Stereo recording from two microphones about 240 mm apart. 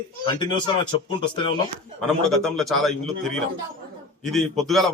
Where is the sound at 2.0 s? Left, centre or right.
Centre.